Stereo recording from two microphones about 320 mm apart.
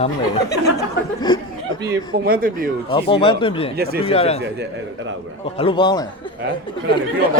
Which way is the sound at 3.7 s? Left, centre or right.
Right.